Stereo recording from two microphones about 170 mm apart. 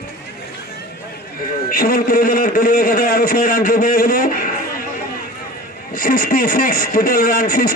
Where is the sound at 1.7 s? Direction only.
60° left (ahead or behind).